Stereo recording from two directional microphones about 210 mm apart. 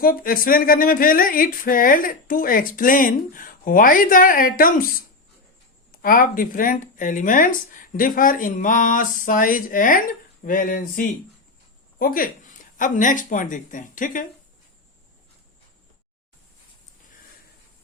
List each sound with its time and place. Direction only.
0.0 s speech: 45° left (ahead or behind)